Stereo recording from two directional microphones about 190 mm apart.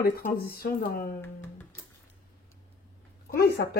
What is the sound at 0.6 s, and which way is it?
Speech, 50° left (ahead or behind).